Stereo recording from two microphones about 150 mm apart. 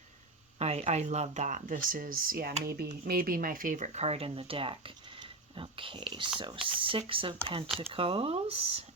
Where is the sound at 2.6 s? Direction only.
90° right.